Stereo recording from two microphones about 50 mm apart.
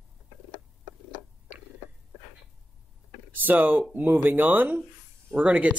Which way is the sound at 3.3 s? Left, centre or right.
Right.